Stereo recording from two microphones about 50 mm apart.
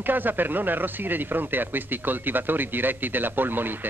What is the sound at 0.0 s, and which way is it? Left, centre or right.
Speech, right.